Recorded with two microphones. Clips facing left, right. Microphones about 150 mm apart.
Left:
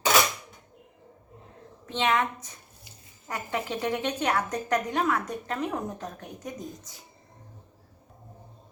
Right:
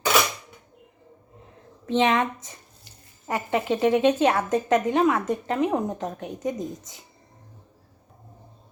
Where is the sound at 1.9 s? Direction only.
25° right (ahead or behind).